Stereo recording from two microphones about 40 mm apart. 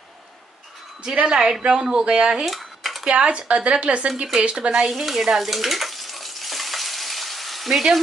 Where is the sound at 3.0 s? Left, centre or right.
Right.